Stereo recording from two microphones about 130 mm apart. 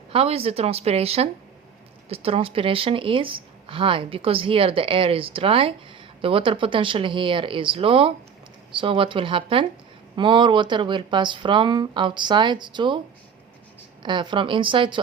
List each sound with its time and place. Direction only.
0.1 s speech: 50° right (ahead or behind)
14.0 s speech: 35° right (ahead or behind)